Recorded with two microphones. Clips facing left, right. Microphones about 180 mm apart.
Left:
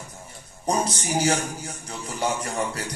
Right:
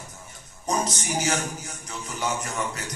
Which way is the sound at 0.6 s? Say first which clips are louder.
Left 2 dB; 30° left (ahead or behind).